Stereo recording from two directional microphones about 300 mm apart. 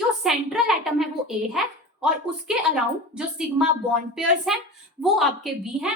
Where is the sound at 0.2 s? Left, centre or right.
Centre.